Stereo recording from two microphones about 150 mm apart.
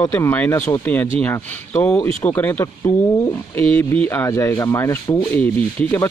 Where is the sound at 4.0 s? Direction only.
15° left (ahead or behind).